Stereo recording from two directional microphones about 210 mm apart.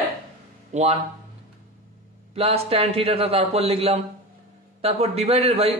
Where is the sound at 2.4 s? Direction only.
25° right (ahead or behind).